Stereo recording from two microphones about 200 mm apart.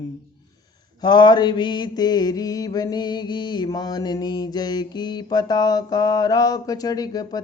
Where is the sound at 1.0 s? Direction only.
20° left (ahead or behind).